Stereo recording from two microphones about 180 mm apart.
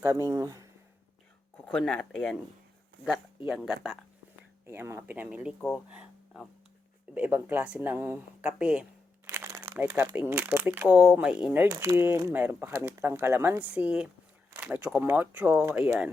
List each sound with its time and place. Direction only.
0.0 s speech: 15° right (ahead or behind)
1.6 s speech: 5° left (ahead or behind)
4.6 s speech: 15° right (ahead or behind)